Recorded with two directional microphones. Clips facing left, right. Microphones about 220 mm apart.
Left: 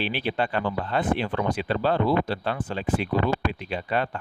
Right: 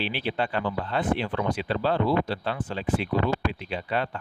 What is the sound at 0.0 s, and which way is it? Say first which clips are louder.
Speech: left 2 dB; 50° left (ahead or behind).